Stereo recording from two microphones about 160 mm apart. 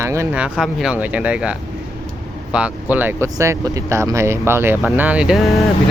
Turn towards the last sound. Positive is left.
turn(degrees=0)  # may be behind; listen again after turning